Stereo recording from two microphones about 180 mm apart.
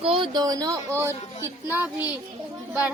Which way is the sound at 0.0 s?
30° right (ahead or behind).